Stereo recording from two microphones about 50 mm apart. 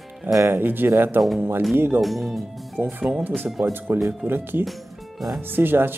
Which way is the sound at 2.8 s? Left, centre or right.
Right.